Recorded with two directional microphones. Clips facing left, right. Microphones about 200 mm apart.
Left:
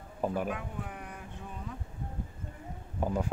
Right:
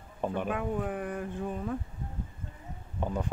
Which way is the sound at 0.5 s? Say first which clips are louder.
Right 7 dB; 50° right (ahead or behind).